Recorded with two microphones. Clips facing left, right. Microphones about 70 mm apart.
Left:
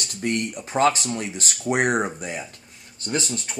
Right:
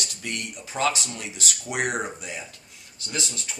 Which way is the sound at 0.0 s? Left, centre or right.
Left.